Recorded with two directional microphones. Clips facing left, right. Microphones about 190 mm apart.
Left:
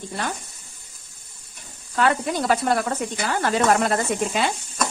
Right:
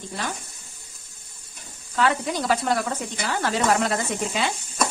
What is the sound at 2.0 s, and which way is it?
Sizzle, 55° left (ahead or behind).